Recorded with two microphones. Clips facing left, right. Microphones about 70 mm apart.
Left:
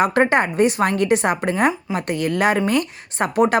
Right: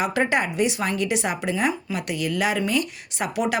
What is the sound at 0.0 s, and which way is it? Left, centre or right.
Speech, left.